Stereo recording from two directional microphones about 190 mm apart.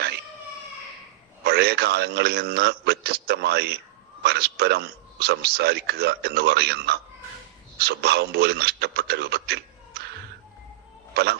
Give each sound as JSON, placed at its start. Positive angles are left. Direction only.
{"t": 1.5, "sound": "speech", "side_deg": -60}
{"t": 11.1, "sound": "speech", "side_deg": -60}